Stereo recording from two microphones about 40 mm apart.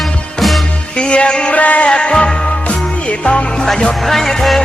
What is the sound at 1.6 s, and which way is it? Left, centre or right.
Music, left.